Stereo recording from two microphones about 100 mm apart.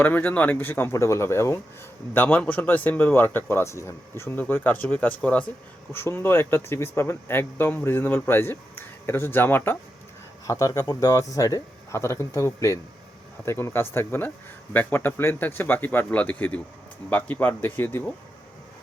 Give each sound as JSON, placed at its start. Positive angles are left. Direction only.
{"t": 0.0, "sound": "speech", "side_deg": 20}
{"t": 10.4, "sound": "speech", "side_deg": 30}